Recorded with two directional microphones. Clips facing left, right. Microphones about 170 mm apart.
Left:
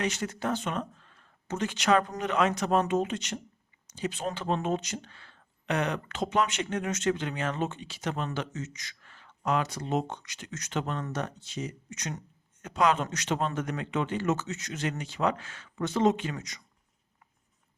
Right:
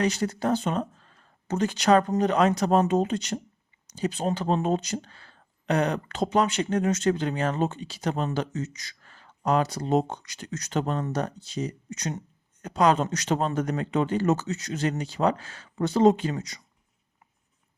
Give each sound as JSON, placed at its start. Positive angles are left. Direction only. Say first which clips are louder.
{"t": 0.0, "sound": "speech", "louder": "right 5 dB", "side_deg": -35}